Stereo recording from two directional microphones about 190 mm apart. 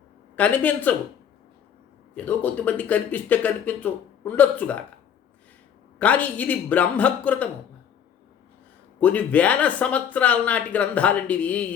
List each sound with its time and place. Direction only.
0.3 s speech: 10° left (ahead or behind)
2.1 s speech: 10° left (ahead or behind)
6.0 s speech: 10° left (ahead or behind)
9.0 s speech: 10° left (ahead or behind)